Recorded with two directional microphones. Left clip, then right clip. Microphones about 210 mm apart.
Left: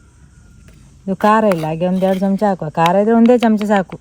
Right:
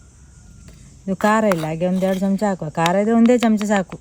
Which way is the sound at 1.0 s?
25° left (ahead or behind).